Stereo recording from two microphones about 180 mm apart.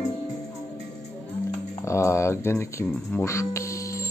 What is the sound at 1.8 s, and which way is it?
Speech, 15° left (ahead or behind).